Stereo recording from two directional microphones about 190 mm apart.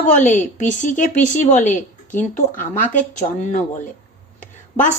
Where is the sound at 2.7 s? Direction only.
40° left (ahead or behind).